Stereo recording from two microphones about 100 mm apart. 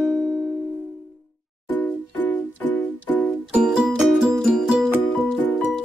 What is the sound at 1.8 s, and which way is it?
Music, 15° left (ahead or behind).